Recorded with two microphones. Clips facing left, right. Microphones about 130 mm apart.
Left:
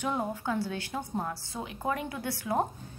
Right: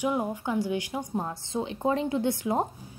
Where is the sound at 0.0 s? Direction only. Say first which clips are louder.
Right 3 dB; 15° right (ahead or behind).